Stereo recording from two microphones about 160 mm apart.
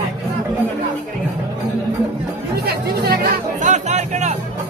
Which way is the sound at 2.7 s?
80° right.